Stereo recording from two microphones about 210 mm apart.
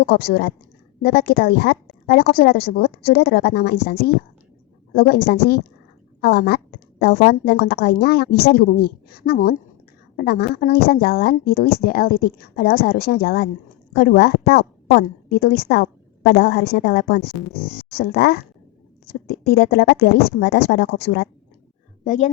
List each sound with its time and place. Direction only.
0.0 s a woman's voice: 50° left (ahead or behind)
22.0 s speech: 40° left (ahead or behind)